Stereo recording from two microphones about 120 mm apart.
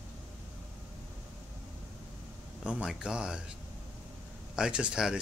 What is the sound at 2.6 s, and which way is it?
Speech, 10° right (ahead or behind).